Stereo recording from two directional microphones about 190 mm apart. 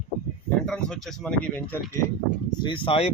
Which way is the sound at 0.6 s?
5° left (ahead or behind).